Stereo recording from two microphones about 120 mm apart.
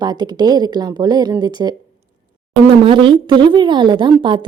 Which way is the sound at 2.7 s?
45° right (ahead or behind).